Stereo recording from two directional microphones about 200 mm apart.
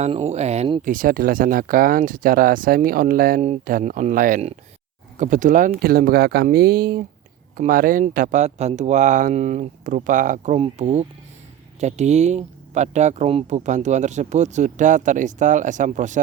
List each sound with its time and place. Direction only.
0.0 s speech: 35° right (ahead or behind)